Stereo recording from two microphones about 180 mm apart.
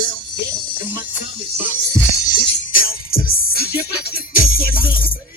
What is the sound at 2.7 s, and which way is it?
Music, 55° left (ahead or behind).